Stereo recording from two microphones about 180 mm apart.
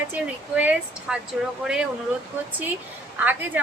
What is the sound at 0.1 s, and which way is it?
A woman's voice, 10° right (ahead or behind).